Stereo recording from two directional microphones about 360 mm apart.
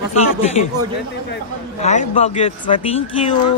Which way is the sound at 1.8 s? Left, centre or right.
Centre.